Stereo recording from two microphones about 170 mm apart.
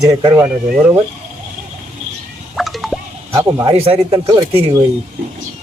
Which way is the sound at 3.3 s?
20° right (ahead or behind).